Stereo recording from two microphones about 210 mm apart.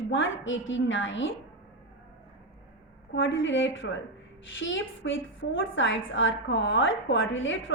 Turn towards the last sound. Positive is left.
turn(degrees=65)  # may be behind; listen again after turning